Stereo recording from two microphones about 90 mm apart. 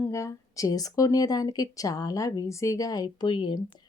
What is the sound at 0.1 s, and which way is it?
Speech, 35° left (ahead or behind).